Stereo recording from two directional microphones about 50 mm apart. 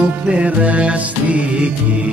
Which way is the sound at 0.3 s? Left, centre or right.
Right.